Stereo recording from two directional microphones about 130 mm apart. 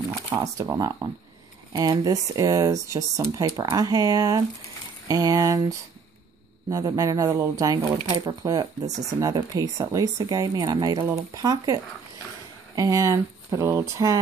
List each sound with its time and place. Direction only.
0.3 s speech: 25° right (ahead or behind)
6.7 s speech: 25° right (ahead or behind)